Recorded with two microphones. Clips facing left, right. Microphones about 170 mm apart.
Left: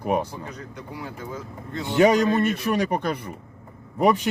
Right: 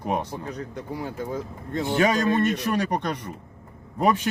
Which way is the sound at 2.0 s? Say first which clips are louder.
Left 4 dB; 15° left (ahead or behind).